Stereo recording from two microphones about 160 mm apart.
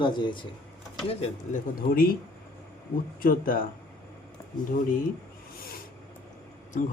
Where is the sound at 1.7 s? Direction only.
65° left (ahead or behind).